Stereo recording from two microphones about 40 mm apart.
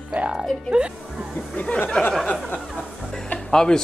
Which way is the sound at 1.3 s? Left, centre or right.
Left.